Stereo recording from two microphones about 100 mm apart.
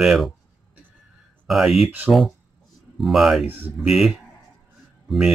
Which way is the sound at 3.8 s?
5° right (ahead or behind).